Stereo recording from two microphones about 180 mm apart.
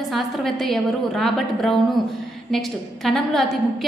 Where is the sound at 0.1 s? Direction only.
Centre (ahead or behind).